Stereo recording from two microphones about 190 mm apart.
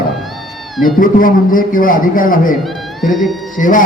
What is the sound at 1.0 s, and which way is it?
A man's voice, 45° left (ahead or behind).